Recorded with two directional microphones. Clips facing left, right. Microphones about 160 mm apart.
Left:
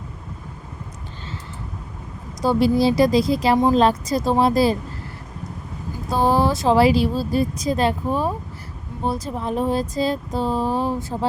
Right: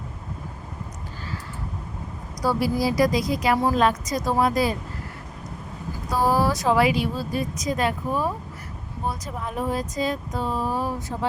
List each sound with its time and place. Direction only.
2.4 s speech: 25° left (ahead or behind)
6.1 s speech: 25° left (ahead or behind)